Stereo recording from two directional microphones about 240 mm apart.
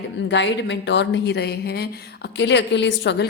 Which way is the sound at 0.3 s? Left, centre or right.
Left.